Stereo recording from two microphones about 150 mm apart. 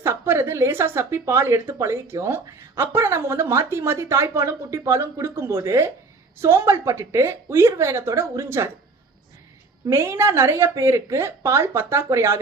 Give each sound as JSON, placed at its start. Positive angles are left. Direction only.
{"t": 0.0, "sound": "speech", "side_deg": -15}
{"t": 9.8, "sound": "speech", "side_deg": -15}